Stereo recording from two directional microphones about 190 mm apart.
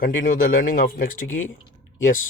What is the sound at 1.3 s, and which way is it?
Speech, 90° left.